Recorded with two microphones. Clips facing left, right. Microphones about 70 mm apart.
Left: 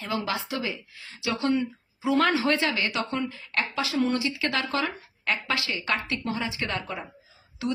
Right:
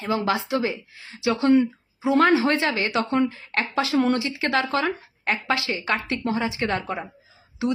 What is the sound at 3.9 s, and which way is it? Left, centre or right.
Speech, right.